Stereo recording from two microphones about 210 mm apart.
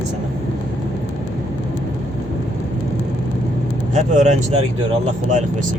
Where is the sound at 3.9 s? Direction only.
35° right (ahead or behind).